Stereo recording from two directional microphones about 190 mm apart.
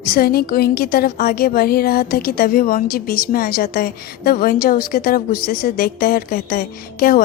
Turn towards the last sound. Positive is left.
turn(degrees=50)  # may be behind; listen again after turning